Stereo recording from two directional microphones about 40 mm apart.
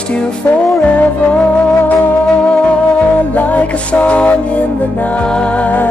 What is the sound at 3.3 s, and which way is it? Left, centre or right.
Music, left.